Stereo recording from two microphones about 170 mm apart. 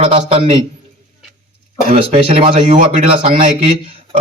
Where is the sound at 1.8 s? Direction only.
35° right (ahead or behind).